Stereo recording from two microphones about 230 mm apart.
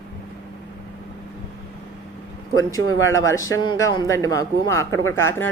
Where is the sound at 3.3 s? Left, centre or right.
Centre.